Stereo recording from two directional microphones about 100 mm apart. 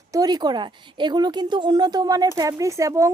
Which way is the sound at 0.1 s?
40° right (ahead or behind).